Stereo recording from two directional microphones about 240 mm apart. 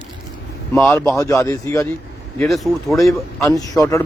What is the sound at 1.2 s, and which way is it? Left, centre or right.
Speech, centre.